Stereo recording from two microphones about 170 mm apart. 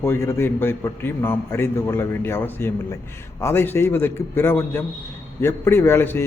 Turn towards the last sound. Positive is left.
turn(degrees=15)  # may be behind; listen again after turning